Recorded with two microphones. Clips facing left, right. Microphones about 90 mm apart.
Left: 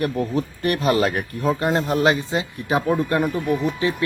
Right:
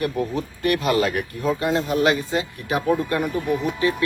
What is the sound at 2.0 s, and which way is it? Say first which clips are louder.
Speech: left 1 dB; 25° left (ahead or behind).